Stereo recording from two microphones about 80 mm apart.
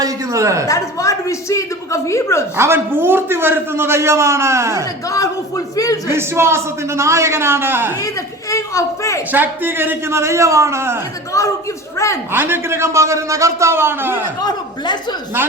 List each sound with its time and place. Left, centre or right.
0.0 s a sound: right
0.7 s a woman's voice: left
2.6 s a man's voice: right
5.0 s a man's voice: left
6.1 s a man's voice: right
8.0 s a woman's voice: left
9.3 s a man's voice: right
11.3 s a woman's voice: left
12.3 s a man's voice: right